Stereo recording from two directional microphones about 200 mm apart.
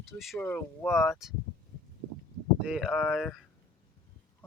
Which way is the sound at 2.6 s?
5° right (ahead or behind).